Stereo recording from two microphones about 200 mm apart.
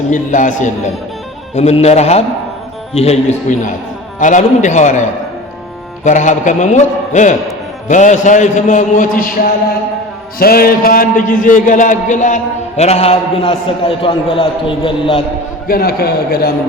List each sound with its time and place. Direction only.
0.1 s a man's voice: 40° left (ahead or behind)
6.1 s a man's voice: 40° left (ahead or behind)
15.6 s a man's voice: 50° left (ahead or behind)